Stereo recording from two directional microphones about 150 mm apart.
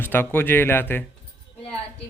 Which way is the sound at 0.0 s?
15° left (ahead or behind).